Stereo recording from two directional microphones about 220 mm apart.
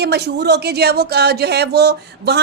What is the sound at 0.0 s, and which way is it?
A woman's voice, 50° right (ahead or behind).